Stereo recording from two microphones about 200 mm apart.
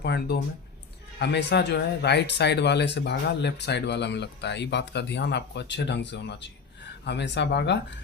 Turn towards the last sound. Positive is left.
turn(degrees=60)  # may be behind; listen again after turning